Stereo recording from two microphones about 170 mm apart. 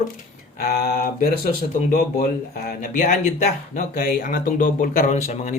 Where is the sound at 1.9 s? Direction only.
60° left (ahead or behind).